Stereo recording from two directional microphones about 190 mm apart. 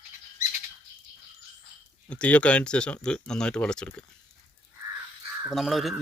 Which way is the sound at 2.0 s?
5° left (ahead or behind).